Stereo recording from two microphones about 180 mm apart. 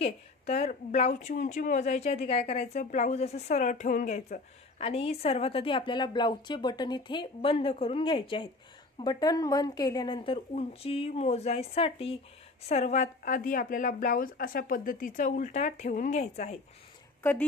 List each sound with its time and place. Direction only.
0.0 s a woman's voice: 40° left (ahead or behind)
17.2 s speech: 10° left (ahead or behind)